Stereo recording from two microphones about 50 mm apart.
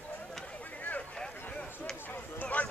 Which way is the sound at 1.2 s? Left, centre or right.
Centre.